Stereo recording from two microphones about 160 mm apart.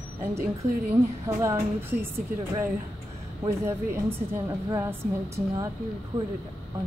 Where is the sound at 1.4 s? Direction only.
15° right (ahead or behind).